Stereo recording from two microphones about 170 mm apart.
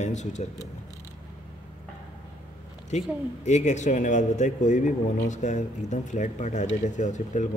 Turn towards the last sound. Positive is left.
turn(degrees=45)  # may be behind; listen again after turning